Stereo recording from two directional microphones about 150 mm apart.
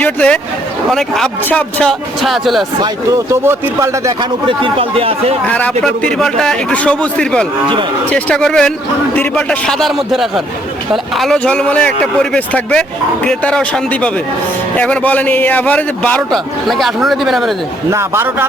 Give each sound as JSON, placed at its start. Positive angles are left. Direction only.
{"t": 0.0, "sound": "a man's voice", "side_deg": 10}
{"t": 3.4, "sound": "speech", "side_deg": -15}
{"t": 4.2, "sound": "speech", "side_deg": -35}
{"t": 5.5, "sound": "a man's voice", "side_deg": 10}
{"t": 17.9, "sound": "a man's voice", "side_deg": -15}